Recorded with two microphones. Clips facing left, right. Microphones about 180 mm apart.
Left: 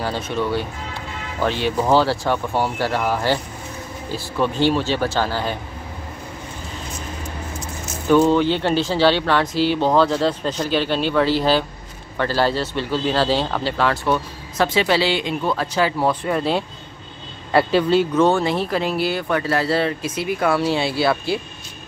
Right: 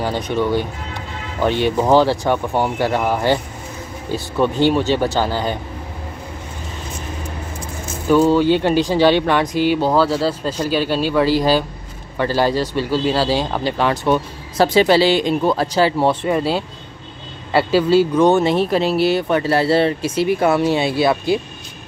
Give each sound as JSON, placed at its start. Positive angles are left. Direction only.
{"t": 0.0, "sound": "speech", "side_deg": -15}
{"t": 4.4, "sound": "speech", "side_deg": -15}
{"t": 8.1, "sound": "speech", "side_deg": -5}
{"t": 14.6, "sound": "speech", "side_deg": -35}
{"t": 16.3, "sound": "speech", "side_deg": -5}